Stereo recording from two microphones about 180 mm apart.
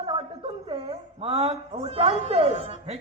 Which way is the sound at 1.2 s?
30° right (ahead or behind).